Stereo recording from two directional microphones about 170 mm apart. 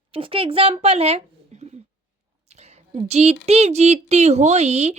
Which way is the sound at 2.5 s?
40° right (ahead or behind).